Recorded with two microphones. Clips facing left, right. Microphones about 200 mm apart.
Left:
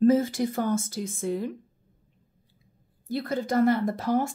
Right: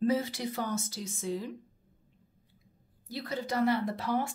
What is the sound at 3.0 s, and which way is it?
Speech, 55° left (ahead or behind).